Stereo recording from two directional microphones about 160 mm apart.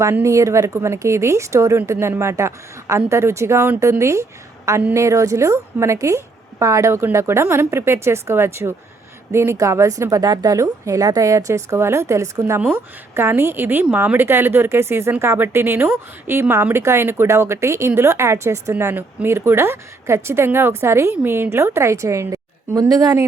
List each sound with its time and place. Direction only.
0.0 s a woman's voice: 20° right (ahead or behind)